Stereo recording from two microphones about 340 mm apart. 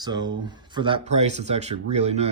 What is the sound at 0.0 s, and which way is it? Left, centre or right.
Speech, centre.